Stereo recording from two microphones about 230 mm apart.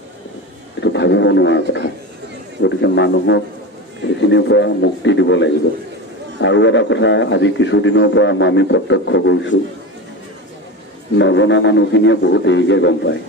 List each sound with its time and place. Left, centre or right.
0.8 s a man's voice: left
11.1 s a man's voice: left